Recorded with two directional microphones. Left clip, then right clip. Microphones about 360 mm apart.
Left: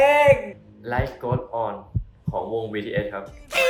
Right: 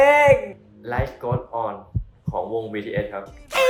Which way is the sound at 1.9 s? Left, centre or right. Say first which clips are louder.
Even; centre.